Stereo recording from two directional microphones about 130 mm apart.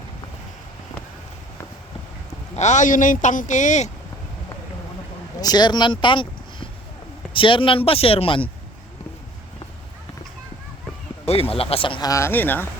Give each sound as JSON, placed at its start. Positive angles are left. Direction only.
{"t": 2.6, "sound": "speech", "side_deg": 65}
{"t": 5.4, "sound": "speech", "side_deg": 30}
{"t": 11.3, "sound": "speech", "side_deg": 50}
{"t": 12.0, "sound": "speech", "side_deg": 20}